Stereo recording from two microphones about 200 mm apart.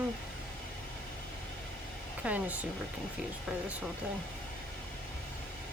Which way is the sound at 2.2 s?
10° right (ahead or behind).